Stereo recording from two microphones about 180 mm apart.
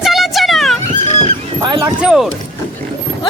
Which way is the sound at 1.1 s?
35° left (ahead or behind).